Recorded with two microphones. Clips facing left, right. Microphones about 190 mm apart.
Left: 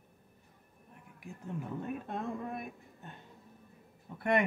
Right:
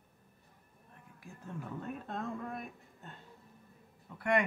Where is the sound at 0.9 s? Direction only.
15° left (ahead or behind).